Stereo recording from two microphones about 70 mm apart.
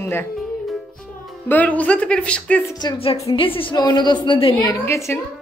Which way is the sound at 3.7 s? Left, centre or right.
Left.